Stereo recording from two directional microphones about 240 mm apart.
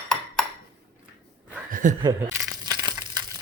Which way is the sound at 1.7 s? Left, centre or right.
Right.